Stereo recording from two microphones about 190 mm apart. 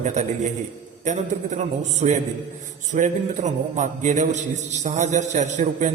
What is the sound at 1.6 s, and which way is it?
A man's voice, 35° right (ahead or behind).